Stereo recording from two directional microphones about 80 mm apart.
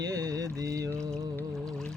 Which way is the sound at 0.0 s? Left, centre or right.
Right.